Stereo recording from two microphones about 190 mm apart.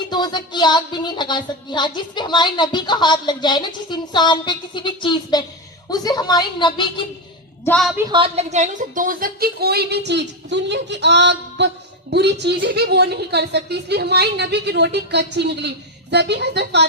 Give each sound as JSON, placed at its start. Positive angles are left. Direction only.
{"t": 0.1, "sound": "speech", "side_deg": 25}
{"t": 7.6, "sound": "a woman's voice", "side_deg": 5}
{"t": 8.1, "sound": "a woman's voice", "side_deg": -30}